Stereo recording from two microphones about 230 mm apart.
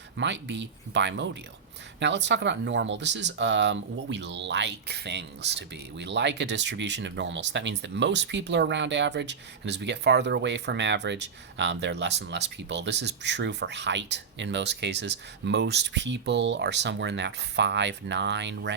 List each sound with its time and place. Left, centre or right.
0.2 s speech: right